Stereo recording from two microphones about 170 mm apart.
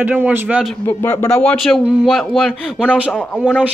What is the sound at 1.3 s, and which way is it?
Speech, 5° left (ahead or behind).